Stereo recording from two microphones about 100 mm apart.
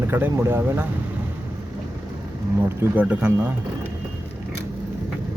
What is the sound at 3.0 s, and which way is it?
Speech, 15° right (ahead or behind).